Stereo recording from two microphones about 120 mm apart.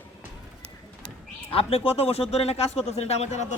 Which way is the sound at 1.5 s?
55° left (ahead or behind).